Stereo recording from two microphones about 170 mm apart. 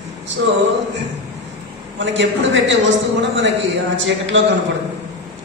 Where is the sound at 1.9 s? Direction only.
90° right.